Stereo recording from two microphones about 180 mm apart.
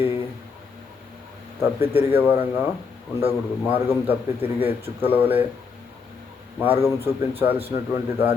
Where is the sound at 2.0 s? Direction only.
10° right (ahead or behind).